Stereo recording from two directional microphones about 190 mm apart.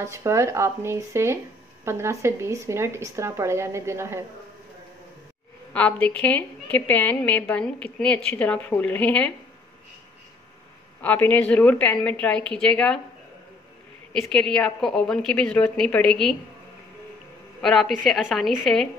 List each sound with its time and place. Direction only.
0.0 s speech: 15° right (ahead or behind)
5.7 s a woman's voice: 10° left (ahead or behind)
11.0 s a woman's voice: 10° left (ahead or behind)
14.3 s a woman's voice: 5° left (ahead or behind)
17.6 s a woman's voice: centre (ahead or behind)